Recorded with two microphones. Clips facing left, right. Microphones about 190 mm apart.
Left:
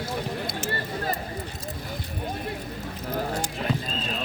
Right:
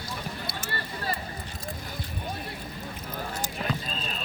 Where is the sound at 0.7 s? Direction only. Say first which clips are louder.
Left 3 dB; 45° left (ahead or behind).